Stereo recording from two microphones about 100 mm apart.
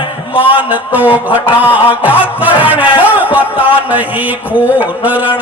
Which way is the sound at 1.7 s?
15° right (ahead or behind).